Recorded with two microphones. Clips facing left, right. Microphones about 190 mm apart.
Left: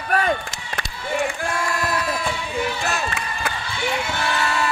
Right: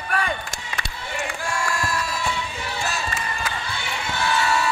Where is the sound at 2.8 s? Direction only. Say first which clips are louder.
Left 2 dB; 60° left (ahead or behind).